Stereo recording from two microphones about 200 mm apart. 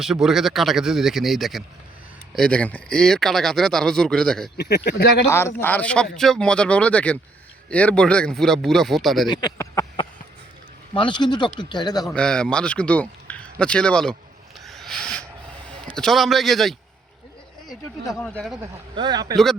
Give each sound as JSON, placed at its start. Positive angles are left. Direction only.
{"t": 0.0, "sound": "speech", "side_deg": 0}
{"t": 4.5, "sound": "speech", "side_deg": 55}
{"t": 5.3, "sound": "speech", "side_deg": 15}
{"t": 9.3, "sound": "speech", "side_deg": 20}
{"t": 12.1, "sound": "speech", "side_deg": 5}
{"t": 14.6, "sound": "a sound", "side_deg": 0}
{"t": 15.9, "sound": "speech", "side_deg": 0}
{"t": 18.1, "sound": "speech", "side_deg": 5}
{"t": 18.6, "sound": "speech", "side_deg": -20}